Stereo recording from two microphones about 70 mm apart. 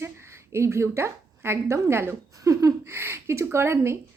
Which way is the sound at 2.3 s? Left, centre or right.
Right.